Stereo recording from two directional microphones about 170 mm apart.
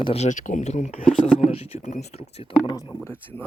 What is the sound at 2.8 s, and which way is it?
Speech, 10° left (ahead or behind).